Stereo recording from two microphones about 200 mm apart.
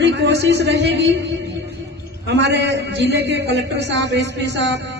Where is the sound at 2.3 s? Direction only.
60° right (ahead or behind).